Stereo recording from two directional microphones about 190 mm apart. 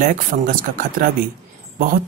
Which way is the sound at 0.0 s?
45° right (ahead or behind).